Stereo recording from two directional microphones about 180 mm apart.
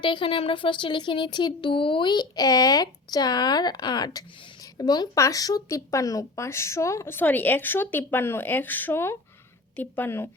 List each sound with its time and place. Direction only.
0.0 s speech: 25° left (ahead or behind); by 10.2 s 10° left (ahead or behind)